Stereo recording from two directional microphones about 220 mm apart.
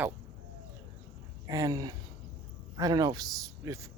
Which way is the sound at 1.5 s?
15° right (ahead or behind).